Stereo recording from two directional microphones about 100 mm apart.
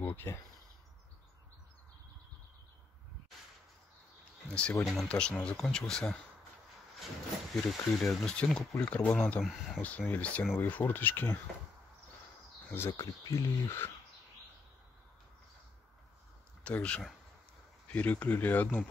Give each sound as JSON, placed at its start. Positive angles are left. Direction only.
{"t": 0.0, "sound": "speech", "side_deg": 25}
{"t": 4.5, "sound": "speech", "side_deg": 10}
{"t": 7.5, "sound": "speech", "side_deg": 0}
{"t": 12.7, "sound": "speech", "side_deg": 25}
{"t": 16.6, "sound": "speech", "side_deg": 10}